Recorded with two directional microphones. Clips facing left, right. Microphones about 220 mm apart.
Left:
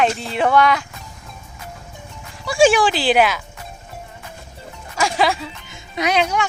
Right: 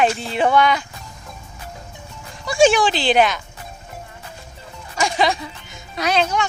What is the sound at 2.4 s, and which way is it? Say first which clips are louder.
Speech: left 1 dB; 5° left (ahead or behind).